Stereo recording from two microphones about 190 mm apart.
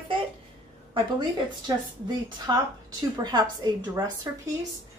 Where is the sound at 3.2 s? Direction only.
20° right (ahead or behind).